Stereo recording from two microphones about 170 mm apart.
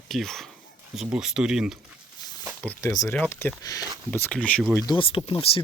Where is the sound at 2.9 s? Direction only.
20° left (ahead or behind).